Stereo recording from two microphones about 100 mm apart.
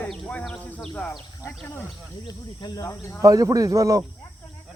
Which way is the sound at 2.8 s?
30° left (ahead or behind).